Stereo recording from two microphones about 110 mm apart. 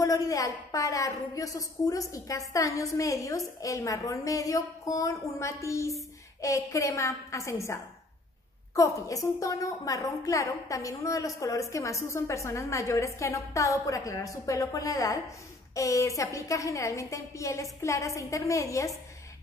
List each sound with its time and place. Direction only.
0.0 s a woman's voice: 30° left (ahead or behind)